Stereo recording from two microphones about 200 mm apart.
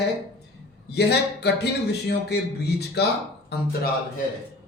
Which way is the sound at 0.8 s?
55° left (ahead or behind).